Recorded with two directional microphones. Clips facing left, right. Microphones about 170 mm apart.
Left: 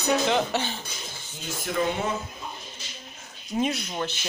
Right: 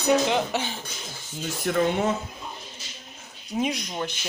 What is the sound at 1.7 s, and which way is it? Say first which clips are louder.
Speech: right 4 dB; 55° right (ahead or behind).